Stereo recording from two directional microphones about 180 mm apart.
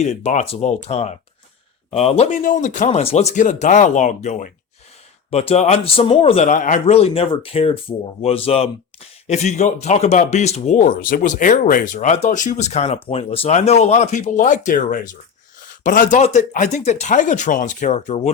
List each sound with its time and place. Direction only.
0.0 s speech: 40° left (ahead or behind)